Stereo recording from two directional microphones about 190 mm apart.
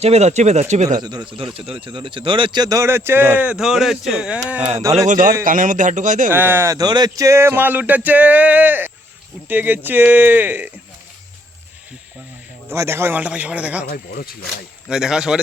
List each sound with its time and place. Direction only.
0.0 s speech: 35° right (ahead or behind)
0.9 s a man's voice: 20° right (ahead or behind)
5.0 s a man's voice: 45° right (ahead or behind)
6.3 s a man's voice: 10° right (ahead or behind)
12.6 s a man's voice: 15° right (ahead or behind)
13.9 s speech: 50° left (ahead or behind)
14.8 s a man's voice: 5° right (ahead or behind)